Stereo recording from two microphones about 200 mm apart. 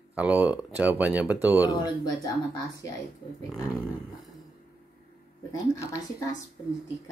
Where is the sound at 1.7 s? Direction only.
20° left (ahead or behind).